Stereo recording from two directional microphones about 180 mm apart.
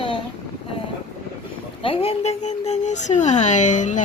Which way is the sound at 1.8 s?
30° left (ahead or behind).